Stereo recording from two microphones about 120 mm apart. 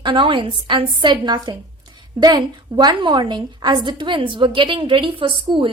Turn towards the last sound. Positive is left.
turn(degrees=-45)  # may be behind; listen again after turning